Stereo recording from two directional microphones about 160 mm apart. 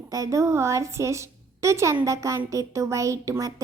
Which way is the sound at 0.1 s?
20° right (ahead or behind).